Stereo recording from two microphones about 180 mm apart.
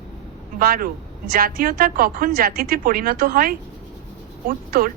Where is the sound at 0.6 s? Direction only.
55° right (ahead or behind).